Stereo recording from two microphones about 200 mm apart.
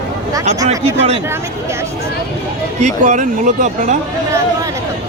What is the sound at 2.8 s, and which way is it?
Speech, 35° right (ahead or behind).